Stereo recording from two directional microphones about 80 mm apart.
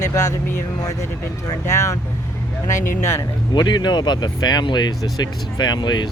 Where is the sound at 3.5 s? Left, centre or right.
Left.